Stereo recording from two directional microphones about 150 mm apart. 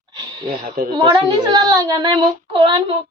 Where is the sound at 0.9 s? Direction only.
40° right (ahead or behind).